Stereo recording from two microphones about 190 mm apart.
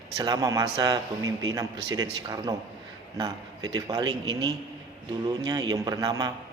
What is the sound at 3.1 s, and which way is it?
A man's voice, 20° right (ahead or behind).